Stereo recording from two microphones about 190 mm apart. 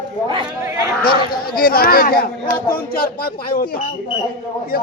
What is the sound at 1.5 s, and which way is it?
Speech, 50° left (ahead or behind).